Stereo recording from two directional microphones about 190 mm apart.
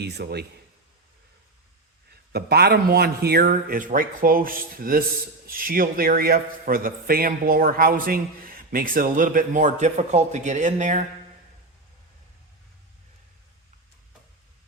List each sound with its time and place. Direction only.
0.0 s a man's voice: 60° right (ahead or behind)
2.3 s a man's voice: 55° right (ahead or behind); by 11.0 s 40° right (ahead or behind)